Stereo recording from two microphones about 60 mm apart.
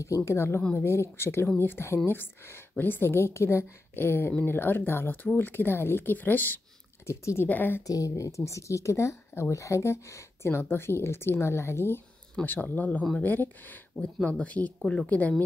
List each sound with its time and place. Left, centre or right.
0.0 s a woman's voice: left
7.1 s a woman's voice: left
7.4 s speech: left
7.8 s speech: left
10.5 s speech: left
12.4 s speech: left
14.0 s speech: centre